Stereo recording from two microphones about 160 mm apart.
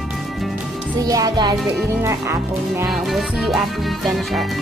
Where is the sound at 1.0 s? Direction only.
25° right (ahead or behind).